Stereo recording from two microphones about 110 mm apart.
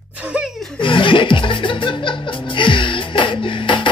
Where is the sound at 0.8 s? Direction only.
50° left (ahead or behind).